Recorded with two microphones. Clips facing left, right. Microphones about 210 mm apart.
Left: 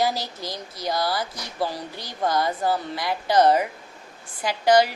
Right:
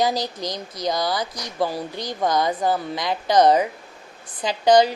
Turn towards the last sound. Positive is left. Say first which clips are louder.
# right 3 dB
turn(degrees=-20)  # may be behind; listen again after turning